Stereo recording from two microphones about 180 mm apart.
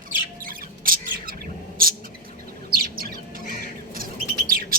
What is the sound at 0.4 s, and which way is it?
Bird, 50° right (ahead or behind).